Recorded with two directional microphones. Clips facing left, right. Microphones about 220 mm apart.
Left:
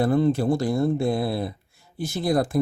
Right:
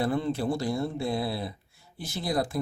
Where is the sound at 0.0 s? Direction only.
45° left (ahead or behind).